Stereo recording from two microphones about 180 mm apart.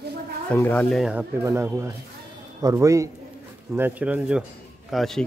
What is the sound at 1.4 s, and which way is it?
Speech, 15° right (ahead or behind).